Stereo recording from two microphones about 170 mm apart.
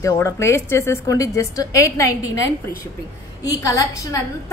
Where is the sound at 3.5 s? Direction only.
20° left (ahead or behind).